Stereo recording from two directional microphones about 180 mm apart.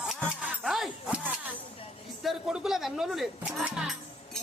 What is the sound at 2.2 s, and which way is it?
Speech, 5° right (ahead or behind).